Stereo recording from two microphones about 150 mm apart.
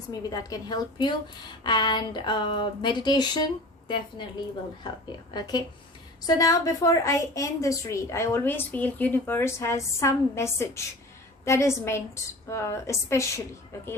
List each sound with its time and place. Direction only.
0.1 s a woman's voice: 25° left (ahead or behind)